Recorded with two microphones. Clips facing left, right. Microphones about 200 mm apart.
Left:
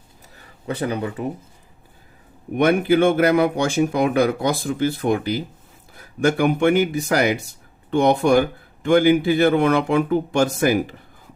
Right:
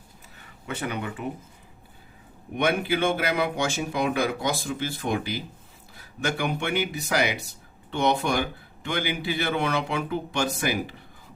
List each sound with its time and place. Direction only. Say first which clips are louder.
0.7 s speech: left 7 dB; 35° left (ahead or behind)
2.6 s speech: left 8 dB; 50° left (ahead or behind)